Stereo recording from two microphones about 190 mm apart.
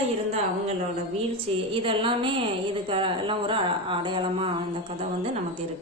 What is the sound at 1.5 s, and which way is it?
A woman's voice, 30° right (ahead or behind).